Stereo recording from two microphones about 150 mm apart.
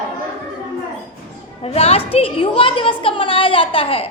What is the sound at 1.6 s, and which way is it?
A woman's voice, 40° left (ahead or behind).